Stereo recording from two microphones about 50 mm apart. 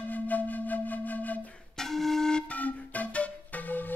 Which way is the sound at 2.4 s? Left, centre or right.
Left.